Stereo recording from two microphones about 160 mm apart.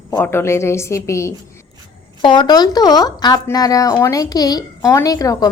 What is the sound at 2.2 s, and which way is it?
A woman's voice, 30° left (ahead or behind).